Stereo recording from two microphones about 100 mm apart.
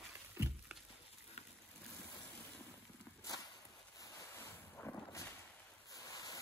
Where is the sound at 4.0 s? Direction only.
35° left (ahead or behind).